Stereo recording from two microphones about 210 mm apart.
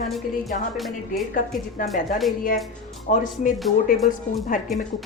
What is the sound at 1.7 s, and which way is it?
A woman's voice, 40° left (ahead or behind).